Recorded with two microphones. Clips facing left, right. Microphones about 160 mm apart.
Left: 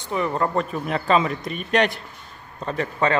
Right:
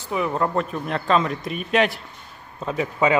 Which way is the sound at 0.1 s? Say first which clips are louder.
Even; centre (ahead or behind).